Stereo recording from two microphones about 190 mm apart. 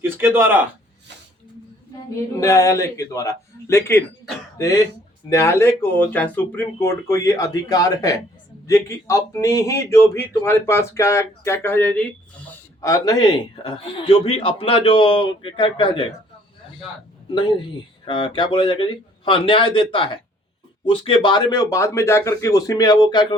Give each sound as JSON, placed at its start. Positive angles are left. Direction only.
{"t": 0.0, "sound": "a man's voice", "side_deg": -10}
{"t": 2.3, "sound": "a man's voice", "side_deg": 15}
{"t": 17.2, "sound": "a man's voice", "side_deg": 25}